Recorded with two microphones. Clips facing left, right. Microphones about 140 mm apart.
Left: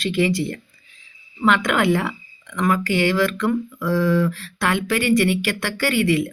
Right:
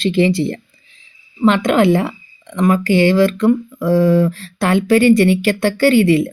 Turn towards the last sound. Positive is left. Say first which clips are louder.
# right 8 dB
turn(degrees=-25)  # may be behind; listen again after turning